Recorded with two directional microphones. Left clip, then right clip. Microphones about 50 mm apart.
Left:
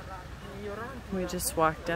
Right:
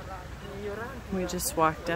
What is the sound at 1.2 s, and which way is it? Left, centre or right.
Speech, centre.